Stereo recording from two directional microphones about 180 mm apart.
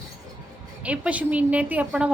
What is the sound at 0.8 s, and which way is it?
A woman's voice, 5° right (ahead or behind).